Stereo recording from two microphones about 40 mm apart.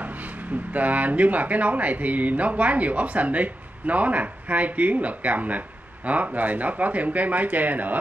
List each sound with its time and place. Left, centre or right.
0.7 s speech: right